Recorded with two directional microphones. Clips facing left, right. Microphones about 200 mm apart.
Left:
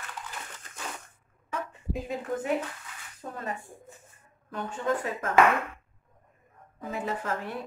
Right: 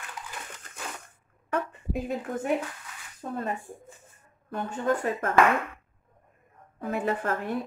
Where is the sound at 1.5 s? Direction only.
60° right (ahead or behind).